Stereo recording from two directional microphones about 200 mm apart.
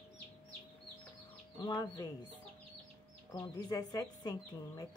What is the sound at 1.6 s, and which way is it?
Speech, 20° left (ahead or behind).